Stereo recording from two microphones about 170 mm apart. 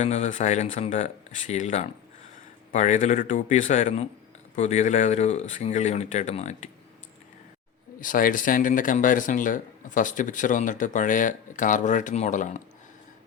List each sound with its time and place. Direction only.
0.0 s speech: 40° left (ahead or behind)
8.0 s speech: 50° left (ahead or behind)